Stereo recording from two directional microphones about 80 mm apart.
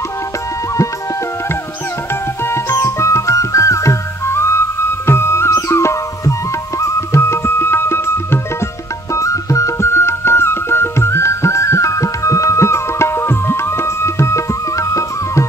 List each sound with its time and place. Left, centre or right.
2.4 s music: left
9.1 s music: left